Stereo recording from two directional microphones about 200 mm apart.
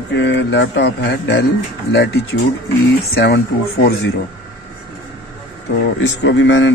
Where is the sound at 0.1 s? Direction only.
65° left (ahead or behind).